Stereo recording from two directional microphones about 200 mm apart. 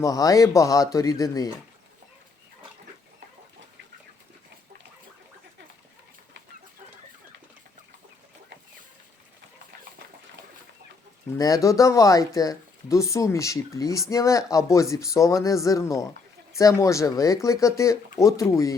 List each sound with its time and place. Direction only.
0.0 s speech: 20° left (ahead or behind)
11.3 s speech: 15° left (ahead or behind)